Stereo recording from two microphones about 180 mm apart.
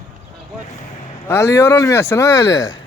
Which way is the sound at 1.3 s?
15° left (ahead or behind).